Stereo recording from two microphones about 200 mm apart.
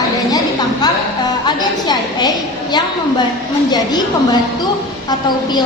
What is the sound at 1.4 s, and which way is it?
A woman's voice, 20° left (ahead or behind).